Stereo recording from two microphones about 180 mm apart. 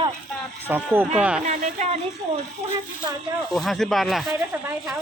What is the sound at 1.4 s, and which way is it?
Speech, 40° right (ahead or behind).